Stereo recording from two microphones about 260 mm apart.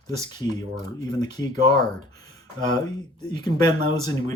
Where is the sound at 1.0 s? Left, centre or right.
Centre.